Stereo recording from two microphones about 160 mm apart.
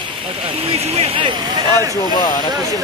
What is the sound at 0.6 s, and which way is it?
Speech, 40° right (ahead or behind).